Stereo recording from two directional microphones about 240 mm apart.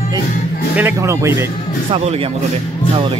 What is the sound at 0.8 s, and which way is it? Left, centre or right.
Speech, centre.